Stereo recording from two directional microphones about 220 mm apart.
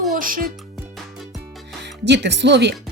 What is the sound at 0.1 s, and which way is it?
Speech, 40° right (ahead or behind).